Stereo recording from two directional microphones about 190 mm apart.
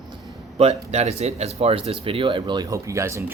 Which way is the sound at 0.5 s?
35° right (ahead or behind).